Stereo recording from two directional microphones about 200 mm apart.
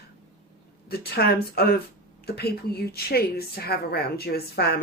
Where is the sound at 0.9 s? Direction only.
50° left (ahead or behind).